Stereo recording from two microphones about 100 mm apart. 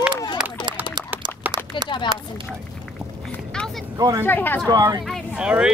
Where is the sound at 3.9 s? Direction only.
40° right (ahead or behind).